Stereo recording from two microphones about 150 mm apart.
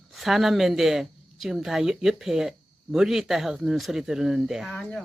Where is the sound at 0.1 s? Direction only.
Centre (ahead or behind).